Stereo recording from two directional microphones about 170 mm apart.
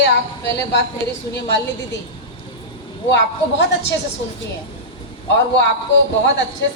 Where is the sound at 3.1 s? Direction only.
90° left.